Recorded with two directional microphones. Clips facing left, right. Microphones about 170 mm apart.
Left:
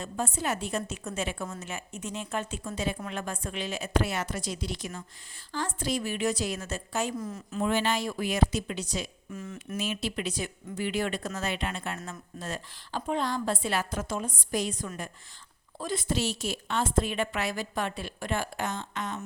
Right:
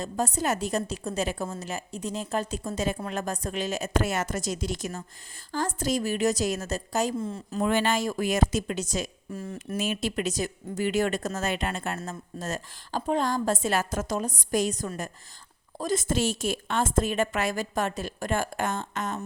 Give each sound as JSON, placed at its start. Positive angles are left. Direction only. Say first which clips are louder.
{"t": 0.0, "sound": "a woman's voice", "louder": "right 4 dB", "side_deg": -40}
{"t": 7.6, "sound": "a woman's voice", "louder": "right 3 dB", "side_deg": -50}
{"t": 9.7, "sound": "a woman's voice", "louder": "right 4 dB", "side_deg": -50}